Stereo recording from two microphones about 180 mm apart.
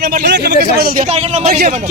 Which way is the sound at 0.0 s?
60° right (ahead or behind).